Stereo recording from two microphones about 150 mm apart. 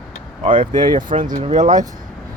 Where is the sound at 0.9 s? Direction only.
60° right (ahead or behind).